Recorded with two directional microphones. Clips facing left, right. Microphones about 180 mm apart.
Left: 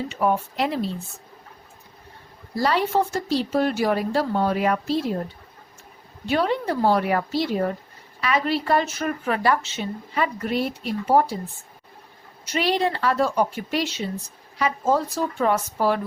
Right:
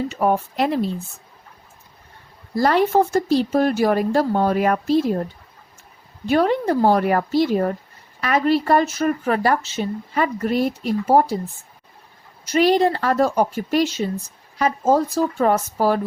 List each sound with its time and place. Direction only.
0.1 s speech: 45° right (ahead or behind)
2.6 s speech: 50° right (ahead or behind)
6.2 s speech: 45° right (ahead or behind)
12.5 s speech: 45° right (ahead or behind)